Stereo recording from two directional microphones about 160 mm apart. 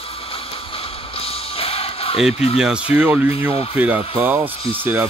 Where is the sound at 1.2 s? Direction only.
35° left (ahead or behind).